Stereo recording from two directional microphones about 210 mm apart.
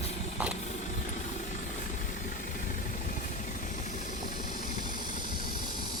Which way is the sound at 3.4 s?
35° left (ahead or behind).